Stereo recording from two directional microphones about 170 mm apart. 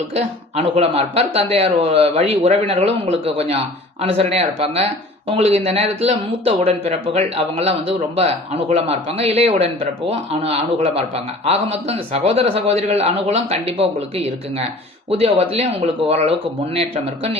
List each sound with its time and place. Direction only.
0.1 s speech: 35° right (ahead or behind)
15.1 s speech: 35° right (ahead or behind)